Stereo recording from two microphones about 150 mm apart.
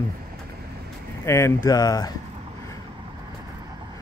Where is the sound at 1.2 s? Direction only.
20° left (ahead or behind).